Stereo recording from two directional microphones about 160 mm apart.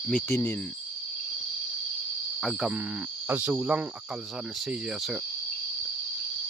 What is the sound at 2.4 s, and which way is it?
Cricket, centre (ahead or behind).